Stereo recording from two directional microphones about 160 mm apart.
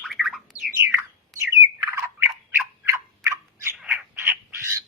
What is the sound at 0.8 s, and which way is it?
Bird, 15° right (ahead or behind).